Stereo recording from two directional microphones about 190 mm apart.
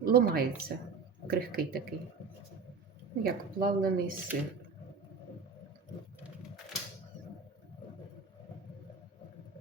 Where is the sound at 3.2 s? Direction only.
50° right (ahead or behind).